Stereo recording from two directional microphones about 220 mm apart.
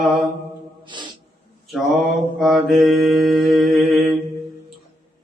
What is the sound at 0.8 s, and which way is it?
Music, 20° right (ahead or behind).